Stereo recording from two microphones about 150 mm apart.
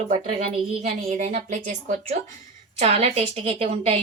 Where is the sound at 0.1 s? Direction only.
45° right (ahead or behind).